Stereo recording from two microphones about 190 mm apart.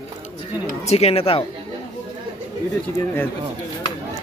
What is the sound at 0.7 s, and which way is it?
Speech, 35° left (ahead or behind).